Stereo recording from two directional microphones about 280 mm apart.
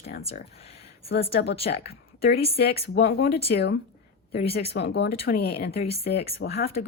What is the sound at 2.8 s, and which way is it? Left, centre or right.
Speech, left.